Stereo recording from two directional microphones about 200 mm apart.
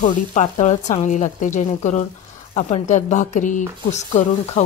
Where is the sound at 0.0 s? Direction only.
35° left (ahead or behind).